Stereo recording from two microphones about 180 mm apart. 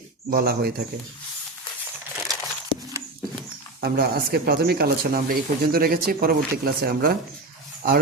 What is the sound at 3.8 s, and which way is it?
Speech, 55° right (ahead or behind).